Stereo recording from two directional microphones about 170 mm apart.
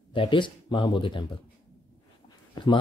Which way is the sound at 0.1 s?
30° left (ahead or behind).